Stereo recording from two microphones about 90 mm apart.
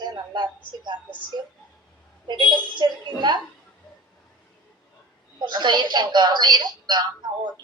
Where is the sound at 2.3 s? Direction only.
60° right (ahead or behind).